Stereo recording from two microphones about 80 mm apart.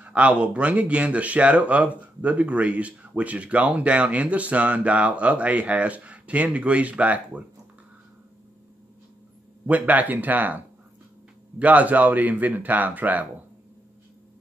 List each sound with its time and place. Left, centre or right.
0.0 s speech: centre
9.7 s speech: right